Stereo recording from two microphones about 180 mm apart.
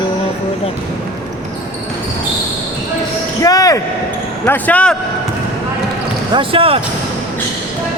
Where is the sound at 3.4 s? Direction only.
20° left (ahead or behind).